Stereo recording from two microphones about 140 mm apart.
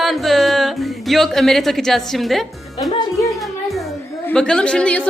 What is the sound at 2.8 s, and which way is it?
Speech, 25° left (ahead or behind).